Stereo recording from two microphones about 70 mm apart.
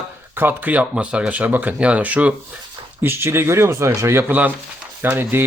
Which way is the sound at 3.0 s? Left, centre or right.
Right.